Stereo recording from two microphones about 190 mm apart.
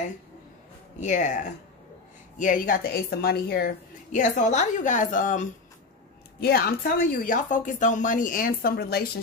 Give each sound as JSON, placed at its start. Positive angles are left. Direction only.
{"t": 1.0, "sound": "a woman's voice", "side_deg": 40}
{"t": 6.4, "sound": "a woman's voice", "side_deg": 55}